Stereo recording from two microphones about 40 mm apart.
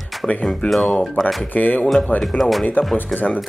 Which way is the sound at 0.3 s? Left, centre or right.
Left.